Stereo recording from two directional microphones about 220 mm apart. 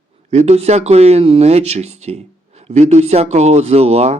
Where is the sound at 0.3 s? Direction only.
30° right (ahead or behind).